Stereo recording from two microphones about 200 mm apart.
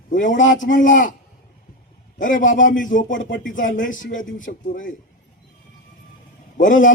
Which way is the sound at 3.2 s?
65° left (ahead or behind).